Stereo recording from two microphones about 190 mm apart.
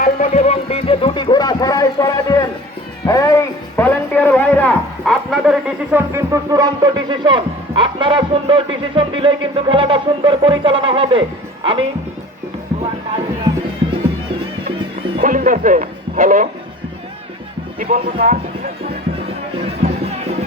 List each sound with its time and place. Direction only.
0.0 s music: 40° left (ahead or behind); by 2.5 s 20° left (ahead or behind)
3.1 s a sound: 15° left (ahead or behind); by 11.9 s 25° right (ahead or behind)
14.8 s music: 25° right (ahead or behind)
15.2 s speech: 45° right (ahead or behind)
17.7 s speech: 50° right (ahead or behind)
19.8 s run: 35° right (ahead or behind)